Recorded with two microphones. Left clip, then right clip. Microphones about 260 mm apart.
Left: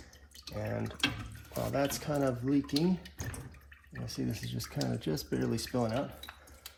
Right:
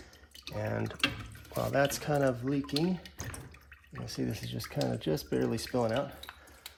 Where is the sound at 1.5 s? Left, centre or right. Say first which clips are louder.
Right 3 dB; right.